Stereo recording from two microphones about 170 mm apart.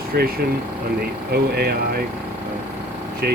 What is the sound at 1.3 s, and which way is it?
Speech, 65° right (ahead or behind).